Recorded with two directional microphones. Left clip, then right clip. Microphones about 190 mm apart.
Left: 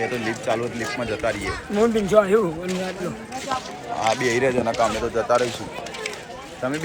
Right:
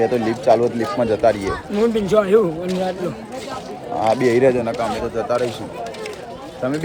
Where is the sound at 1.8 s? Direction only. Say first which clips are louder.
Right 1 dB; 5° right (ahead or behind).